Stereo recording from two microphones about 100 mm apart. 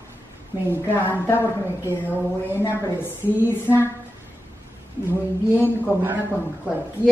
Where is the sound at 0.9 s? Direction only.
20° left (ahead or behind).